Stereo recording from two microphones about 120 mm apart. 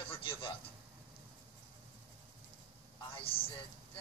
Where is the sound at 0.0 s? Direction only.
50° left (ahead or behind).